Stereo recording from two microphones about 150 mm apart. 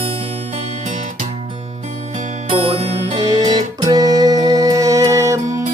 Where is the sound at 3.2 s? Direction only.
25° right (ahead or behind).